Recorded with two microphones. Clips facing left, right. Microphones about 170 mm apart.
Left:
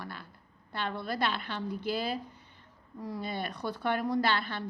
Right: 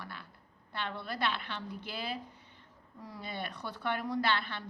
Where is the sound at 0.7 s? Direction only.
40° left (ahead or behind).